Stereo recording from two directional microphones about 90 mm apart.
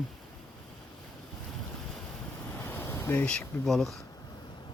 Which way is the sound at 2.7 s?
25° left (ahead or behind).